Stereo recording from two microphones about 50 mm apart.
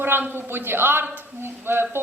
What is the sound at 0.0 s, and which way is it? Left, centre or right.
Speech, right.